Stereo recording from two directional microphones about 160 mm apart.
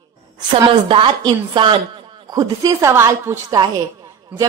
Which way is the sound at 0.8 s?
30° right (ahead or behind).